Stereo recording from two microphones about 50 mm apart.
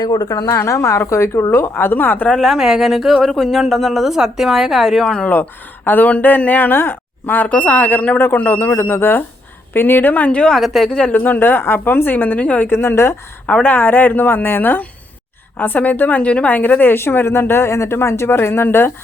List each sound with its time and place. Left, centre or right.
0.4 s a woman's voice: left
1.7 s speech: left
2.4 s a woman's voice: centre
3.2 s a woman's voice: centre
5.2 s speech: left
10.6 s a woman's voice: centre
10.8 s speech: centre
11.1 s speech: left
12.6 s a woman's voice: left
13.5 s speech: left
16.5 s speech: left
17.0 s speech: left